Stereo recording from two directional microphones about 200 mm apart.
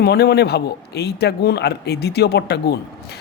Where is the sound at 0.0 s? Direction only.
55° left (ahead or behind).